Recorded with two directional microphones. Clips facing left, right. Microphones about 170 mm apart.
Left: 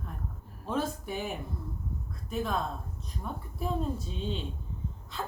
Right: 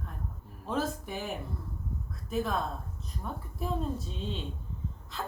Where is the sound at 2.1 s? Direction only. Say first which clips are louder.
Right 1 dB; centre (ahead or behind).